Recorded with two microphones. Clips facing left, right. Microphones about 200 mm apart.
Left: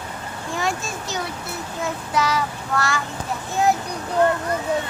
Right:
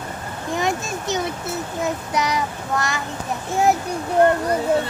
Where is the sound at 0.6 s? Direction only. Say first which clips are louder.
Right 2 dB; 20° right (ahead or behind).